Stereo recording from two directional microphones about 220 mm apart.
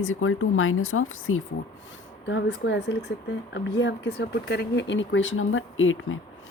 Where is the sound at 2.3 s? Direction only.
55° left (ahead or behind).